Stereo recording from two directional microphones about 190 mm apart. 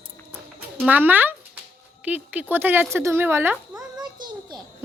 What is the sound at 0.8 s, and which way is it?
Speech, 10° right (ahead or behind).